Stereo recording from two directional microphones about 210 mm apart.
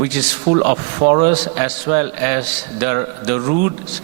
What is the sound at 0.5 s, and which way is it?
Speech, 15° right (ahead or behind).